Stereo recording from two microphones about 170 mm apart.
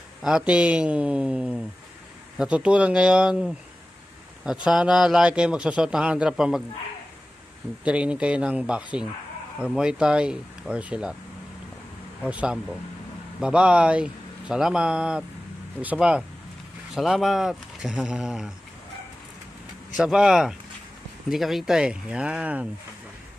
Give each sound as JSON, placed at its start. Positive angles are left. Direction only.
{"t": 0.2, "sound": "a man's voice", "side_deg": -5}
{"t": 4.6, "sound": "a man's voice", "side_deg": -5}
{"t": 7.8, "sound": "a man's voice", "side_deg": -5}
{"t": 12.2, "sound": "a man's voice", "side_deg": -5}
{"t": 20.0, "sound": "a man's voice", "side_deg": -5}